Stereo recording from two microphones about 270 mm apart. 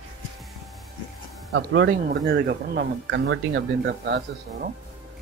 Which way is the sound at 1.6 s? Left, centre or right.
Right.